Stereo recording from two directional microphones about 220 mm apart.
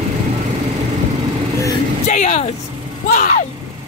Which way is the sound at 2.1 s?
30° left (ahead or behind).